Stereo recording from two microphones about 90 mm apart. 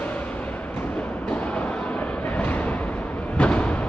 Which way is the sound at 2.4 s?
15° left (ahead or behind).